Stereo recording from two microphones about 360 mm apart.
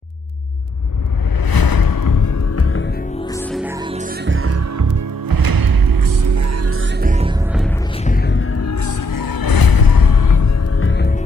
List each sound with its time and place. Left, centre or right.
1.4 s music: left
2.5 s music: left
3.3 s music: centre; by 6.9 s right
7.0 s music: centre
8.0 s music: left
10.8 s music: left